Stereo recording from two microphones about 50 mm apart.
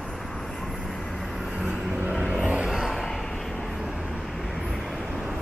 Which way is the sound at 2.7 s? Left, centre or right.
Centre.